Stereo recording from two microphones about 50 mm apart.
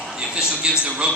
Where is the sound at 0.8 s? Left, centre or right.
Right.